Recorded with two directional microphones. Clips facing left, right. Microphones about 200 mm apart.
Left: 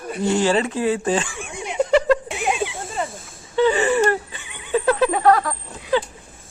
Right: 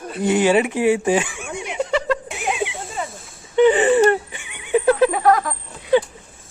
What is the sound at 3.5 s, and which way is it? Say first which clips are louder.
Wheeze: right 4 dB; 20° right (ahead or behind).